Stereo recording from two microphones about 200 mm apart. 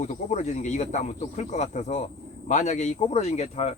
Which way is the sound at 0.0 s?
35° left (ahead or behind).